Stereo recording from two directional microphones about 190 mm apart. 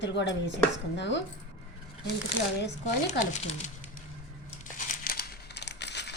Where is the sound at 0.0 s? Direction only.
65° left (ahead or behind).